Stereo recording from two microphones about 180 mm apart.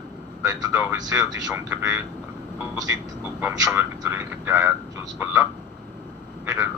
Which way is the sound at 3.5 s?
15° right (ahead or behind).